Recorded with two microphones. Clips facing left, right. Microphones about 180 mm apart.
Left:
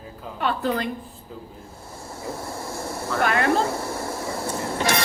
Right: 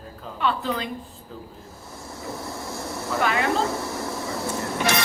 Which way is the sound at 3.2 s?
55° left (ahead or behind).